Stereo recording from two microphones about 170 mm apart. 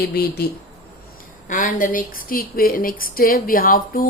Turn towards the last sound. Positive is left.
turn(degrees=55)  # may be behind; listen again after turning